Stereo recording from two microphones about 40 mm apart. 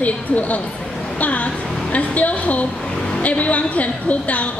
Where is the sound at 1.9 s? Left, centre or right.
Left.